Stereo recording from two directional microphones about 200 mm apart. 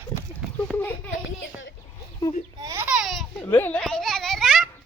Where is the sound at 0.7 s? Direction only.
Centre (ahead or behind).